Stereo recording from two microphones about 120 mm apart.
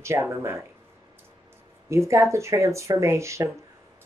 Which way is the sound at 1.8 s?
25° right (ahead or behind).